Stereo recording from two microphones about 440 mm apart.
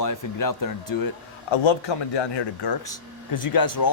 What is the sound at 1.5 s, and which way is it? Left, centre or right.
Speech, left.